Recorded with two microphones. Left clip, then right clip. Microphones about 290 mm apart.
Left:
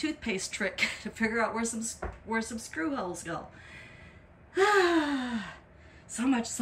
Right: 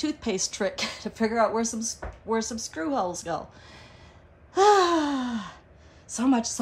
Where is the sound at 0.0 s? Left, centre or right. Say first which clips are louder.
Right 5 dB; centre.